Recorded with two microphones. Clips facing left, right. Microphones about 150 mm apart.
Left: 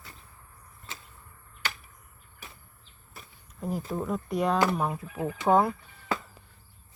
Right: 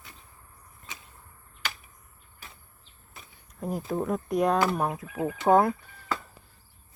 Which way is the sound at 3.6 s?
Centre (ahead or behind).